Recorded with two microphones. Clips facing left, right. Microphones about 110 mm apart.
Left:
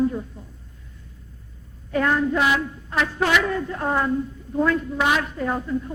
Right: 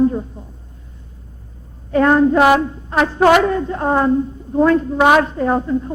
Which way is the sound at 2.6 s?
35° right (ahead or behind).